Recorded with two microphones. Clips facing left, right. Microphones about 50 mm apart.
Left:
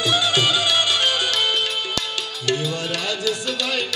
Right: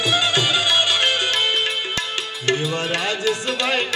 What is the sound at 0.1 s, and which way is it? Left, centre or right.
Music, right.